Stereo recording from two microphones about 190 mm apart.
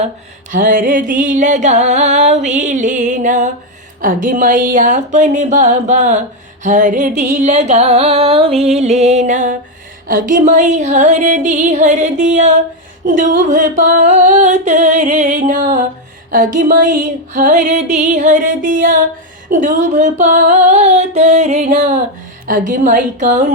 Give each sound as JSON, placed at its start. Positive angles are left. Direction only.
{"t": 0.5, "sound": "music", "side_deg": -45}